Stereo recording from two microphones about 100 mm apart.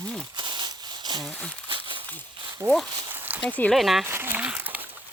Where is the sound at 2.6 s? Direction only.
5° left (ahead or behind).